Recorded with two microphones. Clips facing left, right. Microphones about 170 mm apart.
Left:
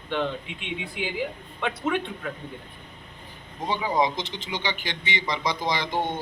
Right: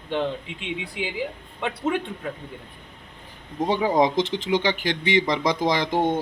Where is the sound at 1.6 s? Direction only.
30° right (ahead or behind).